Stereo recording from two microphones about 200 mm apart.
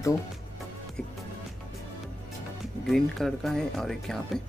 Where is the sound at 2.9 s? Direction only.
Centre (ahead or behind).